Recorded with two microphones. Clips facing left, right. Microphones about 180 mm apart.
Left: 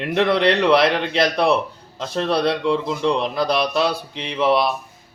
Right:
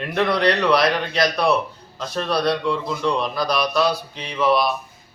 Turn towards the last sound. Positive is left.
turn(degrees=25)  # may be behind; listen again after turning